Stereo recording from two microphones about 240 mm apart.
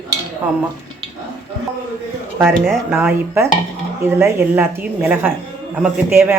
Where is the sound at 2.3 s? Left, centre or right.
Centre.